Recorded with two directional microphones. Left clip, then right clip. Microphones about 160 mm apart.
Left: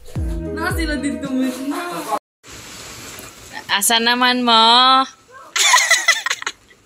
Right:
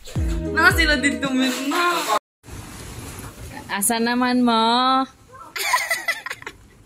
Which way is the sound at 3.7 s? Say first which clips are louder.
Left 7 dB; 5° right (ahead or behind).